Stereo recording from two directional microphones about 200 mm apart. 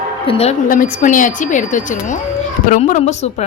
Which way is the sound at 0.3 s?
30° left (ahead or behind).